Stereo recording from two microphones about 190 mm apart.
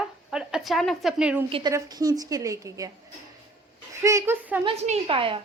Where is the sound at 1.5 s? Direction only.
25° right (ahead or behind).